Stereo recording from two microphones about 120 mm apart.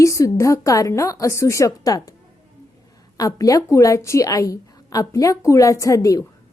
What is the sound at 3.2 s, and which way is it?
A woman's voice, 30° left (ahead or behind).